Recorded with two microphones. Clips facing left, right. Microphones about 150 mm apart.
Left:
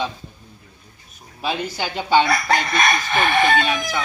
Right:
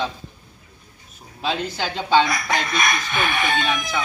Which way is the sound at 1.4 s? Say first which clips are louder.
Even; 10° left (ahead or behind).